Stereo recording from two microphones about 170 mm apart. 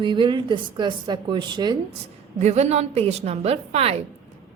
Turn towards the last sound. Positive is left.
turn(degrees=-40)  # may be behind; listen again after turning